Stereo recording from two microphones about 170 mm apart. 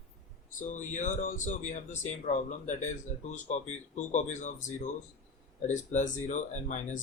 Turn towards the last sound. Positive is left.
turn(degrees=45)  # may be behind; listen again after turning